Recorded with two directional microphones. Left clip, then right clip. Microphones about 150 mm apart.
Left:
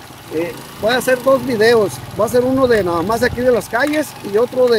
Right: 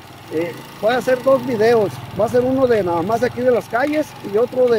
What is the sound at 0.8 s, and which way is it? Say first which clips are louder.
Speech: left 2 dB; 20° left (ahead or behind).